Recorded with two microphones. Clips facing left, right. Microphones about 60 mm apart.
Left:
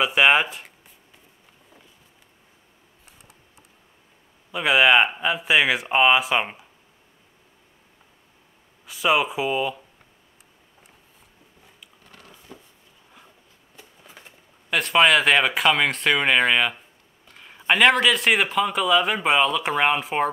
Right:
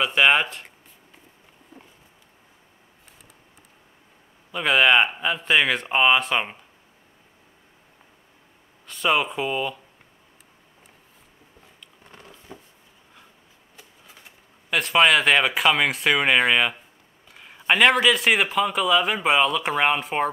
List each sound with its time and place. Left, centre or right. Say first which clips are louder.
0.0 s speech: left 1 dB; centre
4.5 s speech: left 1 dB; centre
8.8 s speech: left 1 dB; centre
12.0 s a sound: right 3 dB; right
13.7 s speech: left 3 dB; centre
17.3 s a sound: even; centre
17.6 s speech: even; centre